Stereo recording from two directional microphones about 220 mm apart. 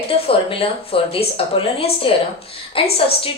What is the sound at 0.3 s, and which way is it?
A woman's voice, 25° left (ahead or behind).